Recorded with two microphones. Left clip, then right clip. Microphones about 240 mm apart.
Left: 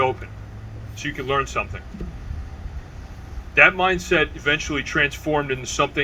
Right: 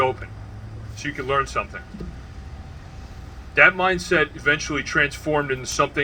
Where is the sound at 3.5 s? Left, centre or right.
Centre.